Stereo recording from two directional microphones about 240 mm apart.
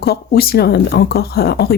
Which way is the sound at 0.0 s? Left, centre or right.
Left.